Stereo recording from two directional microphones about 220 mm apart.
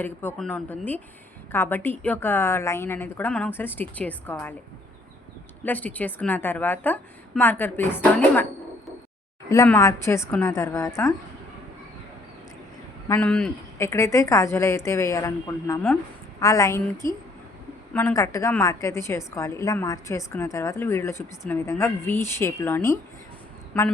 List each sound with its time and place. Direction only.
0.0 s a woman's voice: 10° left (ahead or behind)
5.6 s a woman's voice: 5° left (ahead or behind)
9.5 s a woman's voice: 10° left (ahead or behind)
13.1 s a woman's voice: 5° left (ahead or behind)